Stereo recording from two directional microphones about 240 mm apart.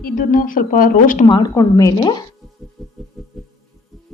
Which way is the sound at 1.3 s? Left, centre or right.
Centre.